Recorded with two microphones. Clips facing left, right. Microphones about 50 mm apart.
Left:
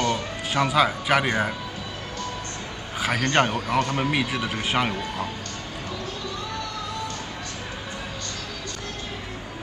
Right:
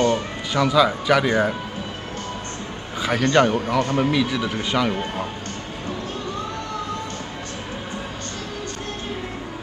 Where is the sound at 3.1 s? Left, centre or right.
Left.